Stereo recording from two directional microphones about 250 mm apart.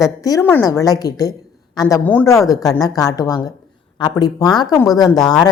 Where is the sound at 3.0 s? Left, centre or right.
Centre.